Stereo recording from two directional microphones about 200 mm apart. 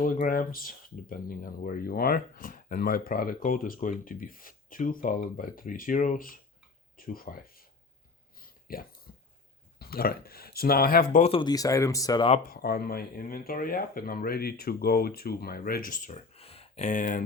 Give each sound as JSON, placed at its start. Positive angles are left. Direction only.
{"t": 0.0, "sound": "speech", "side_deg": 45}
{"t": 8.4, "sound": "a sound", "side_deg": 45}
{"t": 9.7, "sound": "speech", "side_deg": 50}
{"t": 11.2, "sound": "speech", "side_deg": 25}
{"t": 12.5, "sound": "speech", "side_deg": 50}